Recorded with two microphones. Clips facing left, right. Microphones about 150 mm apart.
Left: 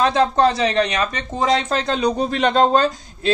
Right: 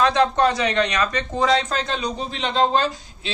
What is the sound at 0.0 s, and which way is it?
A man's voice, 30° left (ahead or behind).